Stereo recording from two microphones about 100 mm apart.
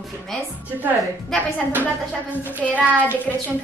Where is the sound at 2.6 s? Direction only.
15° left (ahead or behind).